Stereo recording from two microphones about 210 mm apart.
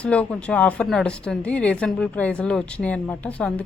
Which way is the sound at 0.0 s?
5° left (ahead or behind).